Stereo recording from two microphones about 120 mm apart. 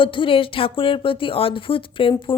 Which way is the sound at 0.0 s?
45° left (ahead or behind).